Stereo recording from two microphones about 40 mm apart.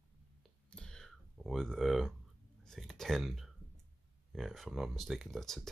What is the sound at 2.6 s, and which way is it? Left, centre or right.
Speech, centre.